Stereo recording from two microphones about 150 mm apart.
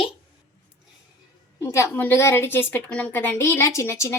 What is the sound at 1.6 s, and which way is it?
A woman's voice, 20° left (ahead or behind).